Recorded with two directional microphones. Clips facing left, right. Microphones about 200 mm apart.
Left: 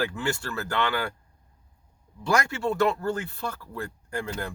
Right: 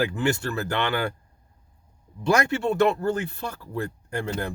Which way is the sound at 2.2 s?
20° right (ahead or behind).